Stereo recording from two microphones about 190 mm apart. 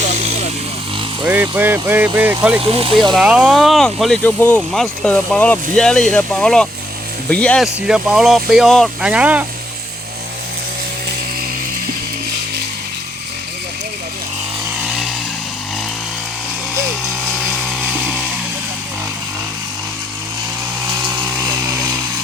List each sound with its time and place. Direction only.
1.2 s speech: 10° right (ahead or behind)
2.6 s speech: 30° right (ahead or behind)
2.9 s speech: centre (ahead or behind)
7.8 s speech: 5° right (ahead or behind)